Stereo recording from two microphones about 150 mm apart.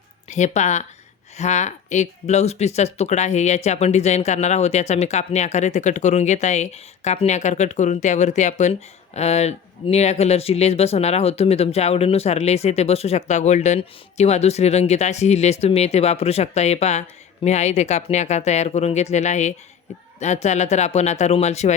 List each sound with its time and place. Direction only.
0.3 s speech: 50° left (ahead or behind)